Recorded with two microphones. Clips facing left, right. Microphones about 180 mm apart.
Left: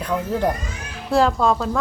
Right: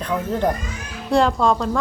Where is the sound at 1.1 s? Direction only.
Centre (ahead or behind).